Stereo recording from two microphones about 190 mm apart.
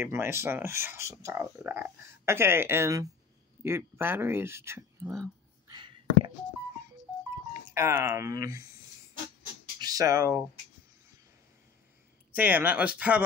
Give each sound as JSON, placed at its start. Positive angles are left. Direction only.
{"t": 0.0, "sound": "speech", "side_deg": -15}
{"t": 5.7, "sound": "a sound", "side_deg": -25}
{"t": 7.6, "sound": "speech", "side_deg": -15}
{"t": 9.8, "sound": "speech", "side_deg": -20}
{"t": 12.4, "sound": "speech", "side_deg": -10}